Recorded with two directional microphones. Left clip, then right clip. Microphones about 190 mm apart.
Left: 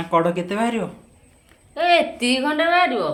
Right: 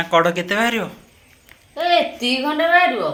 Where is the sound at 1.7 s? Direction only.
25° left (ahead or behind).